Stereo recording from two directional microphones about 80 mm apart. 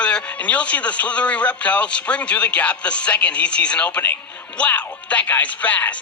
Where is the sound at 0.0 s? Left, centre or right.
Centre.